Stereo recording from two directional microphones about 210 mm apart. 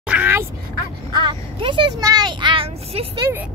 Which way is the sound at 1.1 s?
25° right (ahead or behind).